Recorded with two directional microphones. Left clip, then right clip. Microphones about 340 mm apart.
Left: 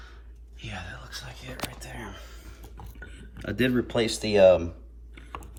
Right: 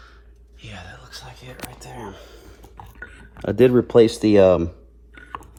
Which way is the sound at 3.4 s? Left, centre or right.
Centre.